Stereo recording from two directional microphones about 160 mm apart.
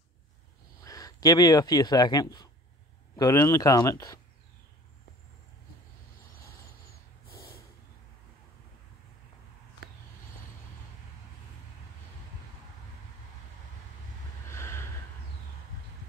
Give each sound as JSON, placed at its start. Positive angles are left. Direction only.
{"t": 0.8, "sound": "speech", "side_deg": 20}
{"t": 14.5, "sound": "gasp", "side_deg": 15}